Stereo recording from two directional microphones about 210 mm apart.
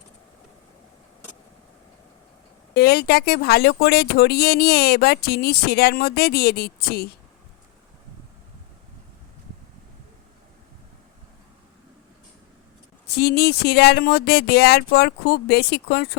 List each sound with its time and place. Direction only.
2.7 s speech: 50° left (ahead or behind)
13.1 s speech: 50° left (ahead or behind)